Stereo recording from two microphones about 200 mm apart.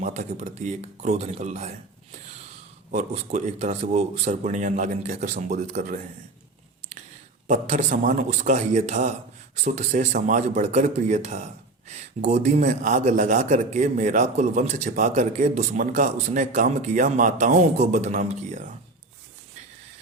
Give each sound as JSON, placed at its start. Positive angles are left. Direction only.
{"t": 0.0, "sound": "a man's voice", "side_deg": -35}
{"t": 2.9, "sound": "a man's voice", "side_deg": -35}
{"t": 7.4, "sound": "a man's voice", "side_deg": -35}